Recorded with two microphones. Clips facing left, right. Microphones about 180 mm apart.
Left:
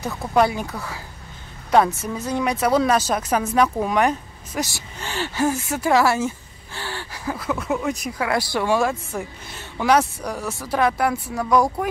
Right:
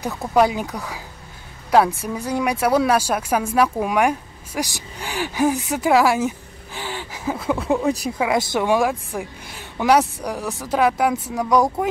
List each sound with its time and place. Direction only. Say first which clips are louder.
0.0 s speech: right 1 dB; 15° right (ahead or behind); by 8.1 s 35° right (ahead or behind)
8.2 s speech: even; 20° right (ahead or behind)